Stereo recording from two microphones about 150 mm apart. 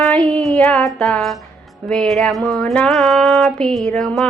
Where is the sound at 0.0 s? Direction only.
10° left (ahead or behind).